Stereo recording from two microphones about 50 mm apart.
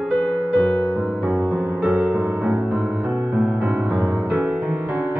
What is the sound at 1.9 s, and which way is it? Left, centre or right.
Music, right.